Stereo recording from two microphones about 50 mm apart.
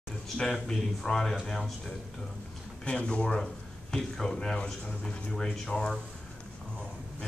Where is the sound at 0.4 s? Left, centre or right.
Centre.